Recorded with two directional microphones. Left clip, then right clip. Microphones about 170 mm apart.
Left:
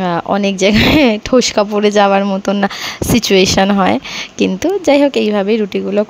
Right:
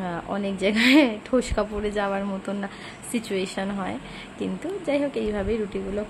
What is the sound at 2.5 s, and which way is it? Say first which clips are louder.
Speech: left 18 dB; 60° left (ahead or behind).